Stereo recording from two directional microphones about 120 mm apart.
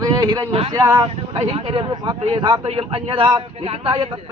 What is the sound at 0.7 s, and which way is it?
Speech, 30° right (ahead or behind).